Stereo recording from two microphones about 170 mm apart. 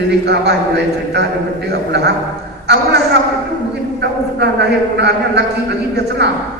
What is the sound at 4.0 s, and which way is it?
A man's voice, 90° right.